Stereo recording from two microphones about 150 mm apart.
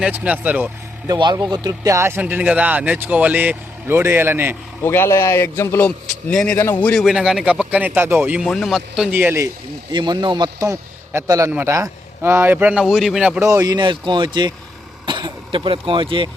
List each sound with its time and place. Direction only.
0.0 s speech: 10° right (ahead or behind)
1.0 s speech: 25° right (ahead or behind)
4.8 s a man's voice: 15° left (ahead or behind)
7.0 s speech: 5° right (ahead or behind)
8.4 s speech: centre (ahead or behind); by 9.5 s 15° right (ahead or behind)
9.9 s a man's voice: 30° right (ahead or behind); by 13.4 s 5° right (ahead or behind)
13.4 s speech: 20° right (ahead or behind)